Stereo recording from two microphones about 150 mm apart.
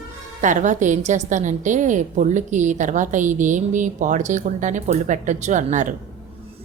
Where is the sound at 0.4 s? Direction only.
55° right (ahead or behind).